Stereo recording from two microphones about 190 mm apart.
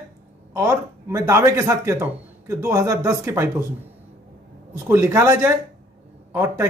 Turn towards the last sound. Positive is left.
turn(degrees=-15)  # may be behind; listen again after turning